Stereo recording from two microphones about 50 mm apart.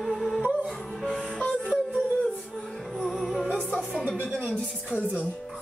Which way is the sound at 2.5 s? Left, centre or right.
Centre.